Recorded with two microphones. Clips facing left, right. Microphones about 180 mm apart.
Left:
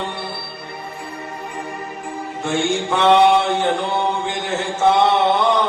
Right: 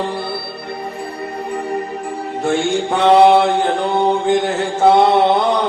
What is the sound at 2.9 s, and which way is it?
Mantra, 35° right (ahead or behind).